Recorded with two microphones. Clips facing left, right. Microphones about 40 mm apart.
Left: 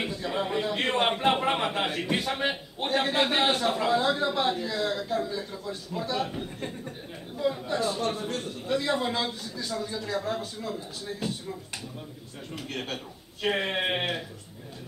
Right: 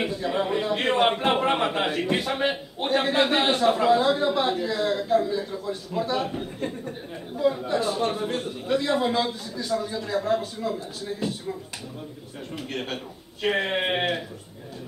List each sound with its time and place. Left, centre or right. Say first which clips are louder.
0.0 s a man's voice: right 4 dB; centre
8.0 s a man's voice: right 4 dB; right
8.7 s a man's voice: right 4 dB; centre
12.5 s a man's voice: right 3 dB; centre